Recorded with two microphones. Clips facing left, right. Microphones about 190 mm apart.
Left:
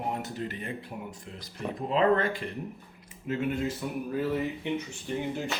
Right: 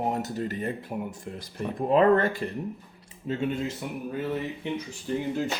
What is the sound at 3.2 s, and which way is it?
Speech, 25° right (ahead or behind).